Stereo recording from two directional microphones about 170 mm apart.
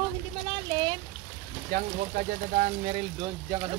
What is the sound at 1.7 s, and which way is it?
Speech, 55° right (ahead or behind).